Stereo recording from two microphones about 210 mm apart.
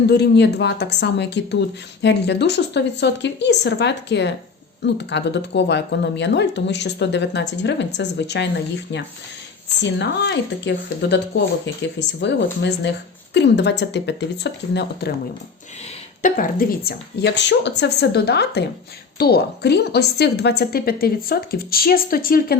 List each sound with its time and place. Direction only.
0.1 s a woman's voice: 50° left (ahead or behind)
16.2 s a woman's voice: 40° left (ahead or behind)